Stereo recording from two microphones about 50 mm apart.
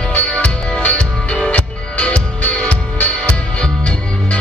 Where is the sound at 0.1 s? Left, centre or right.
Left.